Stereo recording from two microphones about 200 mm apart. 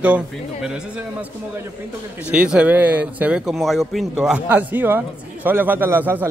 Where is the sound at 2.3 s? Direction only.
5° right (ahead or behind).